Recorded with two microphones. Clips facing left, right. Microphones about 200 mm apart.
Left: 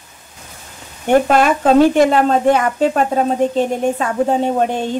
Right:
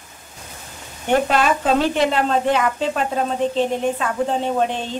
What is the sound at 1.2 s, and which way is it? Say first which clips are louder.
A woman's voice: left 5 dB; 50° left (ahead or behind).